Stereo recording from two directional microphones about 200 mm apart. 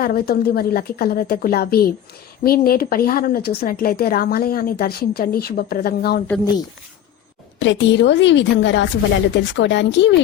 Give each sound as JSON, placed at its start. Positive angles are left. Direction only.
{"t": 0.0, "sound": "speech", "side_deg": 50}
{"t": 6.2, "sound": "speech", "side_deg": 10}
{"t": 7.6, "sound": "a woman's voice", "side_deg": 65}